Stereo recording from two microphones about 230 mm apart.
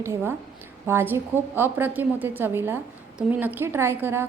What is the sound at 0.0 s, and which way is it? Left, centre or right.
A woman's voice, centre.